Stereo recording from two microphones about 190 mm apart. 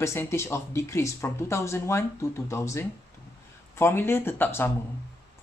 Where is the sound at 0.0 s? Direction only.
15° left (ahead or behind).